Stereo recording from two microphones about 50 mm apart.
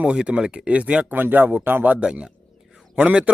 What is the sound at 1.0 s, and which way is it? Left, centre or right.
Speech, right.